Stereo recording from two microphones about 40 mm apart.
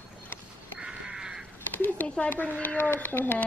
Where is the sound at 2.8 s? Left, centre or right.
Left.